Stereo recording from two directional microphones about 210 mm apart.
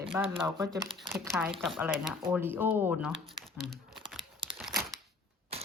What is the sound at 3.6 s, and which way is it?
Crumpling, centre (ahead or behind).